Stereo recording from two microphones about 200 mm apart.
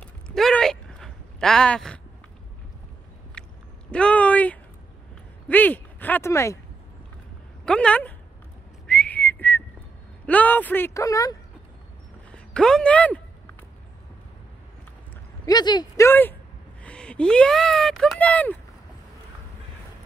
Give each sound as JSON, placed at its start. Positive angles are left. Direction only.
{"t": 0.0, "sound": "a sound", "side_deg": 5}
{"t": 3.4, "sound": "a sound", "side_deg": 5}
{"t": 3.9, "sound": "speech", "side_deg": 5}
{"t": 7.6, "sound": "speech", "side_deg": 5}
{"t": 8.8, "sound": "whistling", "side_deg": 5}
{"t": 10.2, "sound": "speech", "side_deg": 5}
{"t": 12.3, "sound": "speech", "side_deg": 5}
{"t": 15.4, "sound": "speech", "side_deg": 20}